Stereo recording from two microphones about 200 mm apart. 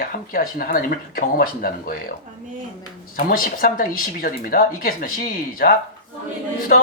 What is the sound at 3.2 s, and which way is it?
Speech, 45° left (ahead or behind).